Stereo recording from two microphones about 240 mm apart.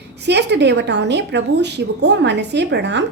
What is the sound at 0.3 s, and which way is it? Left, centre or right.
A woman's voice, right.